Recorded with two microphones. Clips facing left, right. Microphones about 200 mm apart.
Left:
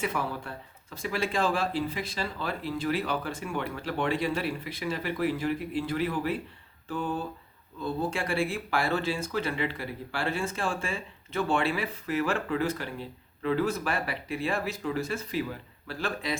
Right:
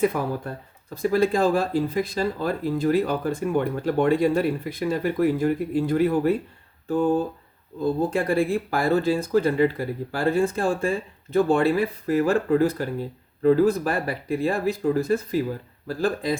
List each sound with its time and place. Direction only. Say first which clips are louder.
0.1 s speech: right 6 dB; 40° right (ahead or behind)